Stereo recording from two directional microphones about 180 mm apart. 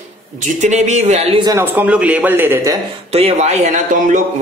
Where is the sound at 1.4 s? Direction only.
15° right (ahead or behind).